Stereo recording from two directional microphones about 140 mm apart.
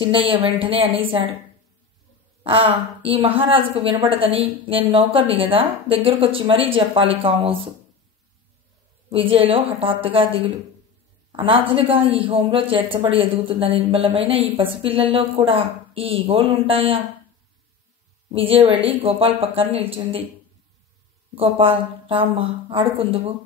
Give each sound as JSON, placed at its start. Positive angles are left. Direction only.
{"t": 0.0, "sound": "a woman's voice", "side_deg": -40}
{"t": 2.4, "sound": "a woman's voice", "side_deg": -40}
{"t": 9.1, "sound": "a woman's voice", "side_deg": -40}
{"t": 18.3, "sound": "speech", "side_deg": -40}
{"t": 21.4, "sound": "a woman's voice", "side_deg": -40}